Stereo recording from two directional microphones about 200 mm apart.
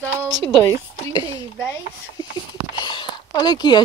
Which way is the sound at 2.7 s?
20° left (ahead or behind).